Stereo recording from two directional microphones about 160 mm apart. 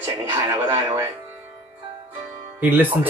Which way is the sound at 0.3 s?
15° right (ahead or behind).